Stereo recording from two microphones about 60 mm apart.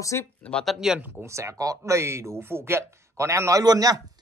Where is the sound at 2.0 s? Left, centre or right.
Right.